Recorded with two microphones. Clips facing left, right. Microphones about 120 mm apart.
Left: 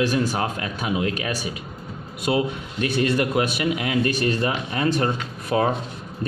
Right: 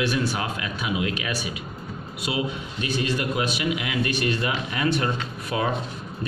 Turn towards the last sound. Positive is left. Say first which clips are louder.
# left 5 dB
turn(degrees=45)  # may be behind; listen again after turning